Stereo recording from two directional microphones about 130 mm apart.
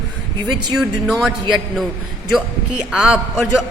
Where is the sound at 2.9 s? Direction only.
5° right (ahead or behind).